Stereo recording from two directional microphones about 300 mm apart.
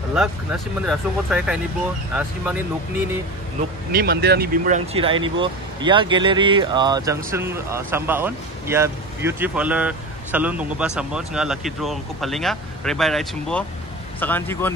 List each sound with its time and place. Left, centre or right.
0.1 s speech: centre
3.9 s speech: right; by 14.7 s centre